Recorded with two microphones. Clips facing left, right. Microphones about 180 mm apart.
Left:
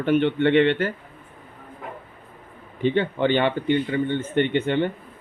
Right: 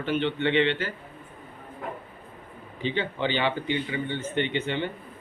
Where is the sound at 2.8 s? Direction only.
55° left (ahead or behind).